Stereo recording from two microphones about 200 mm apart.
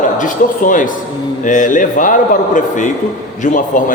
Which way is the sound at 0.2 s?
40° left (ahead or behind).